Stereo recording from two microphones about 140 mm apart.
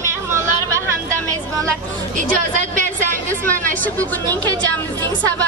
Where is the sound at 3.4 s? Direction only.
75° right (ahead or behind).